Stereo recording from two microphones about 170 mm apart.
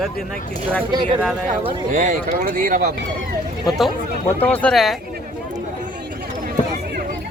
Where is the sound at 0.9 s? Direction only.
30° right (ahead or behind).